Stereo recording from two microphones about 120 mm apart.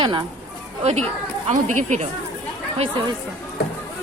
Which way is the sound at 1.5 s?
85° right.